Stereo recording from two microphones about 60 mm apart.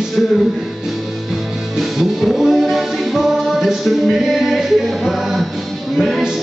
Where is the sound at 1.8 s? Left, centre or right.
Centre.